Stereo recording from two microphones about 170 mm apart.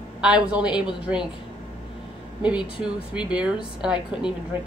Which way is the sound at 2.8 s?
5° right (ahead or behind).